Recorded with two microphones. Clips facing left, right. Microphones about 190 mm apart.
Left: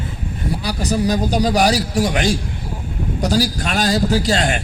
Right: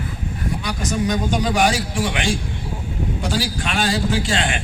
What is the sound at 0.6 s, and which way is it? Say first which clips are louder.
A man's voice: left 4 dB; 35° left (ahead or behind).